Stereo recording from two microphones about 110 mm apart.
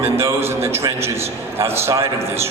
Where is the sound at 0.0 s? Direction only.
25° right (ahead or behind).